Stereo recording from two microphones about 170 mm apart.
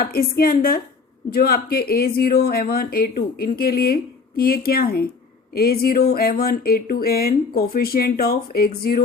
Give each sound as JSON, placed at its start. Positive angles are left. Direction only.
{"t": 0.0, "sound": "speech", "side_deg": 60}